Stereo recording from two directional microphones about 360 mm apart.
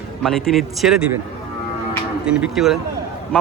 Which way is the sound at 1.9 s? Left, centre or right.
Centre.